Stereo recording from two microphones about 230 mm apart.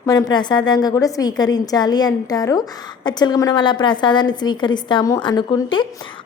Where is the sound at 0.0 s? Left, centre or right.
Centre.